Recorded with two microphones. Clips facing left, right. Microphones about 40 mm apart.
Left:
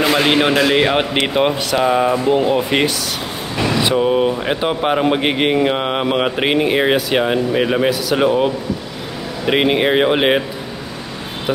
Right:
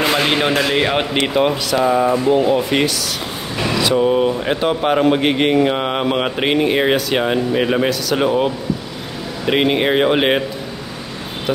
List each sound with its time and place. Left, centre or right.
0.1 s a man's voice: centre
1.2 s speech: centre
3.9 s speech: centre
9.5 s speech: centre